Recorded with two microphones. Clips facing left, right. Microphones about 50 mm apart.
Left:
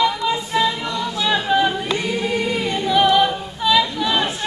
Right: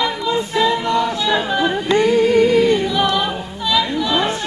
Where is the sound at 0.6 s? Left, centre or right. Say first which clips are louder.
Right 6 dB; right.